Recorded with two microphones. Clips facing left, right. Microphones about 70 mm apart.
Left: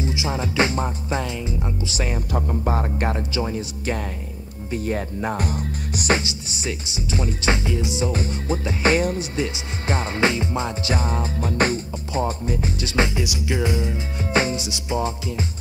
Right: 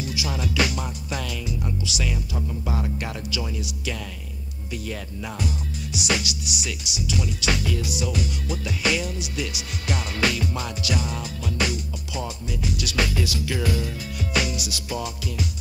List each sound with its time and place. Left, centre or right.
0.0 s speech: left